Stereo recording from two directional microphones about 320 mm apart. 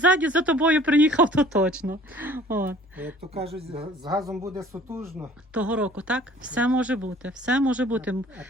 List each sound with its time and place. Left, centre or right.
0.0 s a man's voice: centre
4.2 s speech: centre